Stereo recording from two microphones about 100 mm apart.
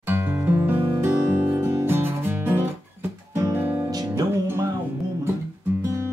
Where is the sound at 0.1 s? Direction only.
20° right (ahead or behind).